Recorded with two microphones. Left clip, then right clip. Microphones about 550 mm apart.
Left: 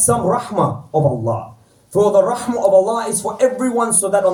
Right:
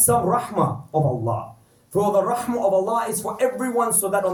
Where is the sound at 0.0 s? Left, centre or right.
Right.